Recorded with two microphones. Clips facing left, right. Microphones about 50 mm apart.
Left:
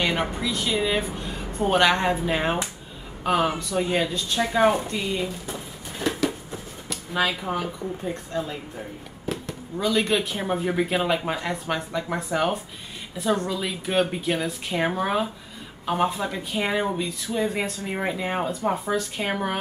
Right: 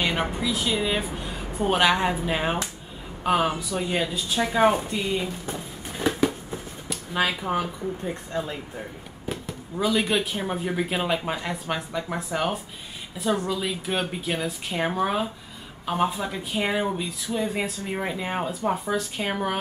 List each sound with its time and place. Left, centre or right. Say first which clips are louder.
0.0 s speech: left 1 dB; centre
6.0 s a sound: right 2 dB; centre
6.9 s speech: even; centre